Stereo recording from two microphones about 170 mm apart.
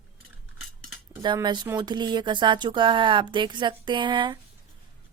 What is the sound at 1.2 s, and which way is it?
Speech, 25° right (ahead or behind).